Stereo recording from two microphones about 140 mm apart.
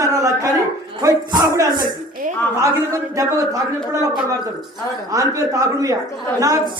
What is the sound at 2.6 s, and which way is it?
A man's voice, 25° right (ahead or behind).